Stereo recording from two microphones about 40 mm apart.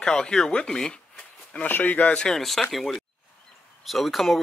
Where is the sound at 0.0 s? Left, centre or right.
Left.